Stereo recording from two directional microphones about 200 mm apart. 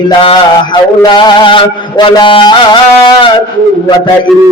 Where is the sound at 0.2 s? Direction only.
25° left (ahead or behind).